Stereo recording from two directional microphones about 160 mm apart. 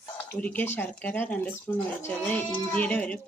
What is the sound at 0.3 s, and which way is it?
A child's voice, 10° left (ahead or behind).